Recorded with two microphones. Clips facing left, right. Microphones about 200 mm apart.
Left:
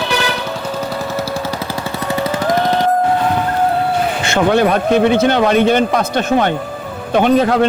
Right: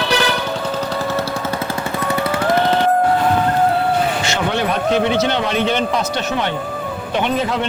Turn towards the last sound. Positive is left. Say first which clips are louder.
# left 7 dB
turn(degrees=45)  # may be behind; listen again after turning